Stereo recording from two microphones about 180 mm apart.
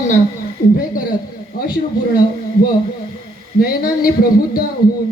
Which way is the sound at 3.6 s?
55° left (ahead or behind).